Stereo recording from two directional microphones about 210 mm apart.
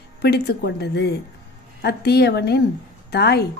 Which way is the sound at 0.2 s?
50° left (ahead or behind).